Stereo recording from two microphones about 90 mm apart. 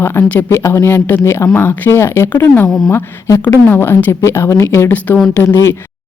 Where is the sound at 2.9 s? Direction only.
35° left (ahead or behind).